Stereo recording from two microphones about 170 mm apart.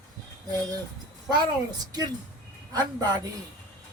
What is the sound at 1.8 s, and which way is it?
Speech, 25° right (ahead or behind).